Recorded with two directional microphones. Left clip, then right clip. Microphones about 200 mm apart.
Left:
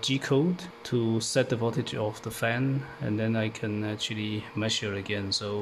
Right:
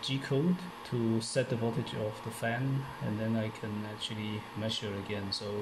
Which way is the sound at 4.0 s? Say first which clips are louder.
Left 6 dB; 35° left (ahead or behind).